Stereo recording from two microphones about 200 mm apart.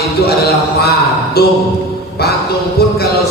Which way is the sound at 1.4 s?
50° left (ahead or behind).